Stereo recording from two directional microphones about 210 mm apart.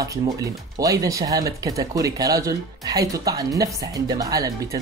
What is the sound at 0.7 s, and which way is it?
Speech, 15° right (ahead or behind).